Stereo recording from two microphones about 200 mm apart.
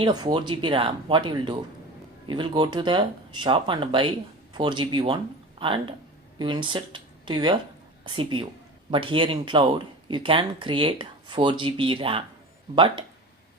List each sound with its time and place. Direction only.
0.0 s speech: 20° right (ahead or behind)